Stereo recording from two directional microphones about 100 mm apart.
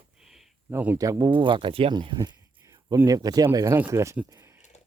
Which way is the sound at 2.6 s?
30° right (ahead or behind).